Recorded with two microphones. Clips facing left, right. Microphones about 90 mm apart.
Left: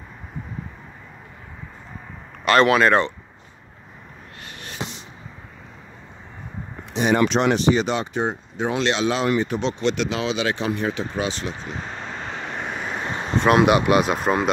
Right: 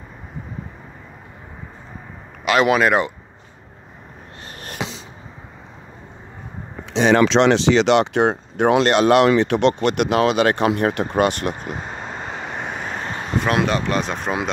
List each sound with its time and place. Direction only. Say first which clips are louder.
2.4 s speech: even; 5° right (ahead or behind)
4.8 s a sound: right 4 dB; 90° right
6.9 s speech: right 4 dB; 90° right; by 11.7 s 55° right (ahead or behind)
11.7 s vehicle: right 2 dB; 15° right (ahead or behind)
13.4 s speech: left 4 dB; centre (ahead or behind)